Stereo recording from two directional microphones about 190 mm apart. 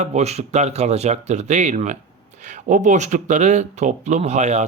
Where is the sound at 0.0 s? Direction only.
35° right (ahead or behind).